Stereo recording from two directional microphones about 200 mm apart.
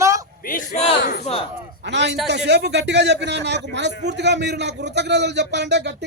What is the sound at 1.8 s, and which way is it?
A man's voice, 60° right (ahead or behind).